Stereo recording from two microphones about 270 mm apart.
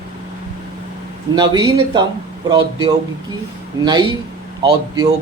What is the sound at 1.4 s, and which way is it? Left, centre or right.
Speech, centre.